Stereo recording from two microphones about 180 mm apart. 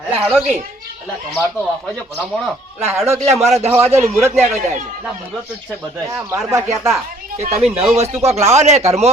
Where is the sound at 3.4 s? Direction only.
35° right (ahead or behind).